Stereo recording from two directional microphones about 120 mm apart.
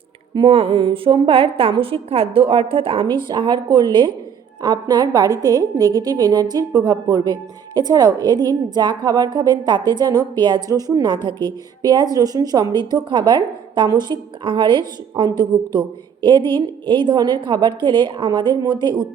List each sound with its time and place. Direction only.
0.3 s a woman's voice: 50° right (ahead or behind)